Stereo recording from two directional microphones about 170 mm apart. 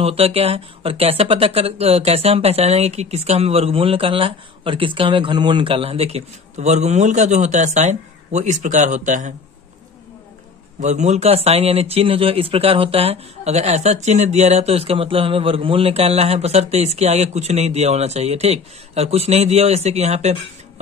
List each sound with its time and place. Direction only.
0.0 s speech: 35° right (ahead or behind)
10.8 s speech: 45° right (ahead or behind)